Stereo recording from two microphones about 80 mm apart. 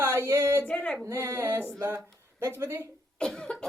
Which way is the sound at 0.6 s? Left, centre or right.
Centre.